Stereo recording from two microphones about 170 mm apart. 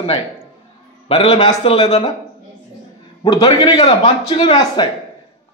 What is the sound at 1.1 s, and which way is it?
Speech, 35° left (ahead or behind).